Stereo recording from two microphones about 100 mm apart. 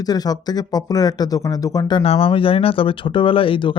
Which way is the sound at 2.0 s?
80° left.